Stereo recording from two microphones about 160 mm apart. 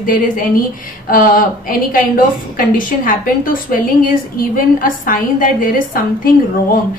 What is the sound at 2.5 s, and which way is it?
A woman's voice, 60° left (ahead or behind).